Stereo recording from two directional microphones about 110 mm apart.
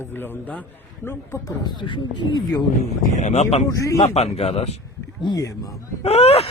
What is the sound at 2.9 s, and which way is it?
Speech, 90° left.